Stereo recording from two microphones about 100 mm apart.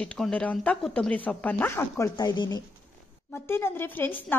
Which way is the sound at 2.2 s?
40° left (ahead or behind).